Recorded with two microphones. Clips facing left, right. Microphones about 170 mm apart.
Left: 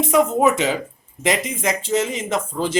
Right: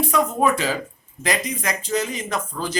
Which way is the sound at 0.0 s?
20° left (ahead or behind).